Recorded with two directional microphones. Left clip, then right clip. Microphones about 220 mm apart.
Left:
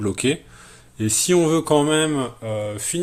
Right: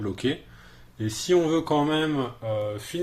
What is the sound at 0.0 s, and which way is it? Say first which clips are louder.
Speech: left 6 dB; 50° left (ahead or behind).